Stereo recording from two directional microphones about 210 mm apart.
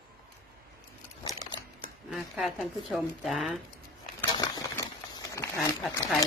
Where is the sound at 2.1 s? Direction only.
Centre (ahead or behind).